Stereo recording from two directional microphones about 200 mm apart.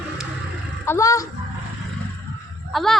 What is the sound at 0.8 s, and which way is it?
Speech, 15° left (ahead or behind).